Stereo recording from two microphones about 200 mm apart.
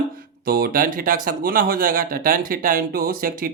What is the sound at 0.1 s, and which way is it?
Speech, 45° right (ahead or behind).